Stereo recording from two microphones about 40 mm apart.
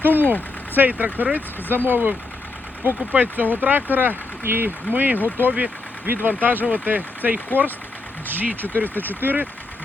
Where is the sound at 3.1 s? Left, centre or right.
Right.